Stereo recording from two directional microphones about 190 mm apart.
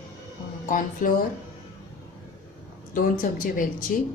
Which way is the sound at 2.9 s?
45° left (ahead or behind).